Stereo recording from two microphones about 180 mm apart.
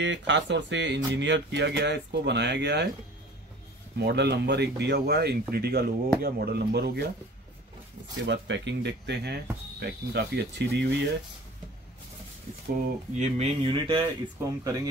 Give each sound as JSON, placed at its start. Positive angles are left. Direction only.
{"t": 0.0, "sound": "speech", "side_deg": -85}
{"t": 4.0, "sound": "speech", "side_deg": -70}
{"t": 8.3, "sound": "speech", "side_deg": -85}
{"t": 13.2, "sound": "speech", "side_deg": -35}